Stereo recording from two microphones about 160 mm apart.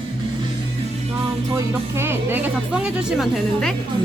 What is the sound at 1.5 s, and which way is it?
Speech, 15° right (ahead or behind).